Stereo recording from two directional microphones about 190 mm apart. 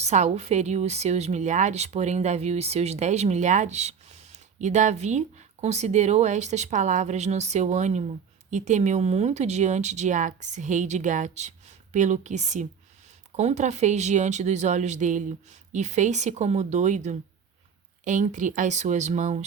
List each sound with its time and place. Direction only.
0.0 s speech: 35° right (ahead or behind)